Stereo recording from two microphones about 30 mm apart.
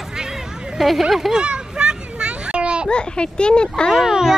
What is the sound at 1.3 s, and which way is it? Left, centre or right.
Children playing, right.